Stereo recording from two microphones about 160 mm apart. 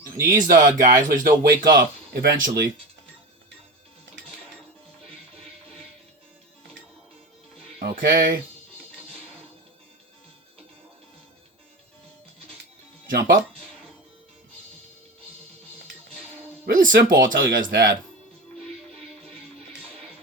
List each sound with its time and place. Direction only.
0.2 s speech: 60° right (ahead or behind)
1.7 s speech: 70° right (ahead or behind)
7.8 s speech: 70° right (ahead or behind)
13.1 s speech: 65° right (ahead or behind)
16.6 s speech: 60° right (ahead or behind)